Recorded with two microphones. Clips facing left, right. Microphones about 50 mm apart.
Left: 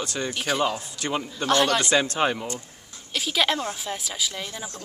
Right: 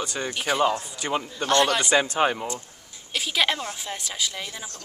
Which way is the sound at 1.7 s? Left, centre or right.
Centre.